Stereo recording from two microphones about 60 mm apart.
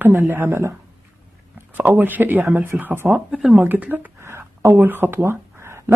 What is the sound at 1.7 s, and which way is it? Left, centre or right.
Speech, right.